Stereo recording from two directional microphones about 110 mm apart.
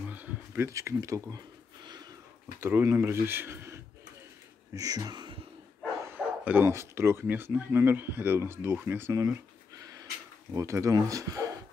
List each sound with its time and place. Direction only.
0.0 s a sound: 15° right (ahead or behind)
0.7 s speech: 30° right (ahead or behind)
2.6 s speech: 25° right (ahead or behind)
4.7 s speech: 35° right (ahead or behind)
6.0 s speech: 15° right (ahead or behind)
10.5 s speech: 30° right (ahead or behind)